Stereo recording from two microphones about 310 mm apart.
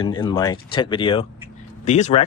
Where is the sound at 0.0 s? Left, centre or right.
Centre.